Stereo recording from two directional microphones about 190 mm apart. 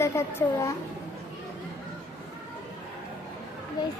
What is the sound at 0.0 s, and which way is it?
Child singing, 15° left (ahead or behind).